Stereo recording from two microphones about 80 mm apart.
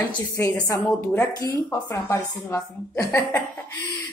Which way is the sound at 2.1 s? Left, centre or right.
Left.